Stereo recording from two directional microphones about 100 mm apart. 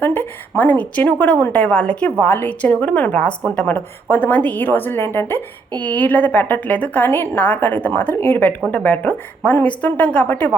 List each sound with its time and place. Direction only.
0.0 s a woman's voice: 20° left (ahead or behind)